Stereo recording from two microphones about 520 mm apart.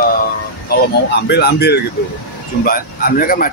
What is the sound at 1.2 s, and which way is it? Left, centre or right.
A man's voice, centre.